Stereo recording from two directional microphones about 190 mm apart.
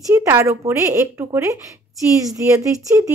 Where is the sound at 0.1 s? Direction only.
15° right (ahead or behind).